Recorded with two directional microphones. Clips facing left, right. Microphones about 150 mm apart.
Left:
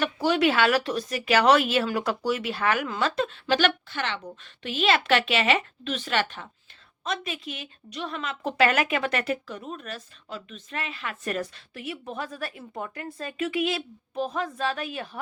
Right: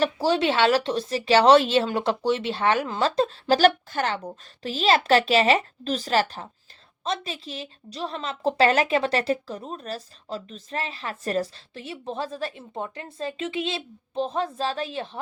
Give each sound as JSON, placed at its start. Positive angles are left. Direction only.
{"t": 0.0, "sound": "a woman's voice", "side_deg": -30}